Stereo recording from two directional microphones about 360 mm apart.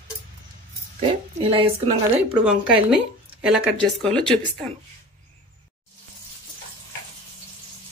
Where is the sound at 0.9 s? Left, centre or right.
Centre.